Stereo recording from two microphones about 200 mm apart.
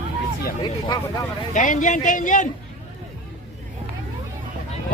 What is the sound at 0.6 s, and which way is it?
Speech, 20° left (ahead or behind).